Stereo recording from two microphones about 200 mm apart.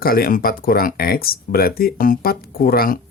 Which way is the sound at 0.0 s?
50° left (ahead or behind).